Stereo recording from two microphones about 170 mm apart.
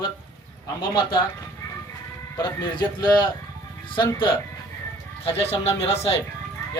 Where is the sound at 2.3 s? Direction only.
25° left (ahead or behind).